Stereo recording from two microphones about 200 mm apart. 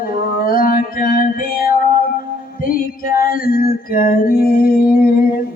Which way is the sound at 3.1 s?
45° left (ahead or behind).